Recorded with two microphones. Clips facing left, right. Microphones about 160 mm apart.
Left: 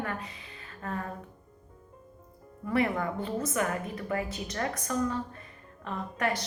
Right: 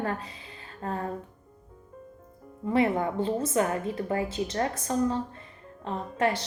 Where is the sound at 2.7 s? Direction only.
25° right (ahead or behind).